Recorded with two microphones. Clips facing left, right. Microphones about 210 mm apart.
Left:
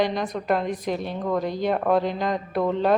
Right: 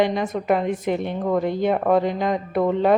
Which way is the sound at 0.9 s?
15° right (ahead or behind).